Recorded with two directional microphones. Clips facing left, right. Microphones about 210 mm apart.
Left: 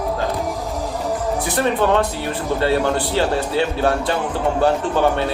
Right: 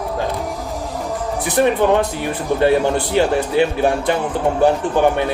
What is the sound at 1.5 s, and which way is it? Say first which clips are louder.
A man's voice: right 4 dB; 15° right (ahead or behind).